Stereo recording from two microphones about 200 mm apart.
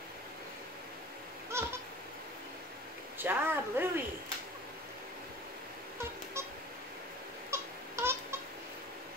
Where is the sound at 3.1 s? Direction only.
10° right (ahead or behind).